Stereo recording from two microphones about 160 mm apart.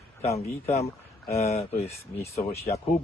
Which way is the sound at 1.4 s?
40° left (ahead or behind).